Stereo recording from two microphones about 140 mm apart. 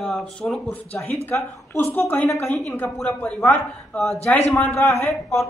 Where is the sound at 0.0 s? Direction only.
5° left (ahead or behind).